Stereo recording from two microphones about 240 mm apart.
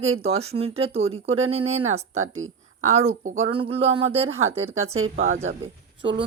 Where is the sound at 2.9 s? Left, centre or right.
Right.